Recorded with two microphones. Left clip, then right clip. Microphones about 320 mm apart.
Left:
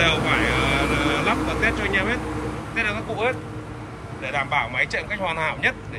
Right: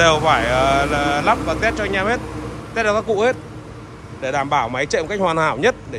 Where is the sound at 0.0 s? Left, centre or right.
Centre.